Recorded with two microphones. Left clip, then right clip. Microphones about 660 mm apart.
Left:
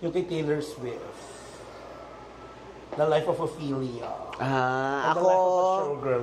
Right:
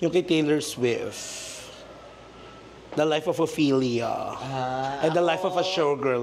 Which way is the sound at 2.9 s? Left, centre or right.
Right.